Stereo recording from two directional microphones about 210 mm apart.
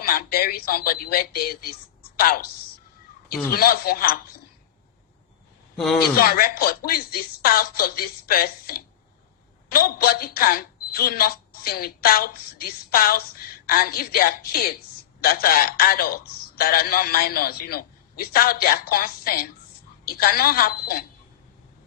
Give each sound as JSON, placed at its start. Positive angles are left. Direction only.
{"t": 0.0, "sound": "a woman's voice", "side_deg": 45}
{"t": 3.5, "sound": "a man's voice", "side_deg": 45}
{"t": 5.7, "sound": "speech", "side_deg": 0}
{"t": 6.1, "sound": "a man's voice", "side_deg": 45}